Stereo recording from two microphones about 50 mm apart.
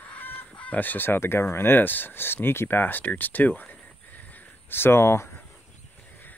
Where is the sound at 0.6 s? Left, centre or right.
Left.